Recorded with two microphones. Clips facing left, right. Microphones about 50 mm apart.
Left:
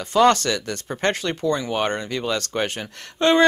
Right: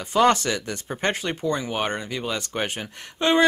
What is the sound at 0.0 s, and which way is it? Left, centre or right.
Speech, centre.